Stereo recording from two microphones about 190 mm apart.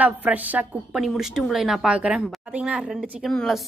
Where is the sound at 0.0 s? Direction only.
10° right (ahead or behind).